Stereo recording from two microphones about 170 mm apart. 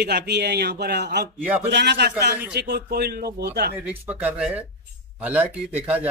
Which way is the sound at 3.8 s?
10° right (ahead or behind).